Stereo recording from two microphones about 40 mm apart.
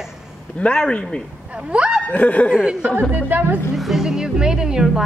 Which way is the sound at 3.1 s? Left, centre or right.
Right.